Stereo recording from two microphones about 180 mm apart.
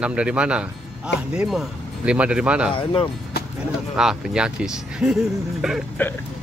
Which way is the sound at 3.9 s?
5° right (ahead or behind).